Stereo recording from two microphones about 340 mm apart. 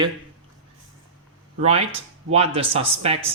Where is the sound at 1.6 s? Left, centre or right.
Centre.